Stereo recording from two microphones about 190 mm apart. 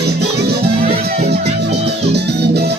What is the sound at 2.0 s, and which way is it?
Music, 60° right (ahead or behind).